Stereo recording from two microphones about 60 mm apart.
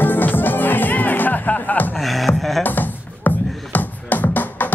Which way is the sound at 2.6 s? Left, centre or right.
Left.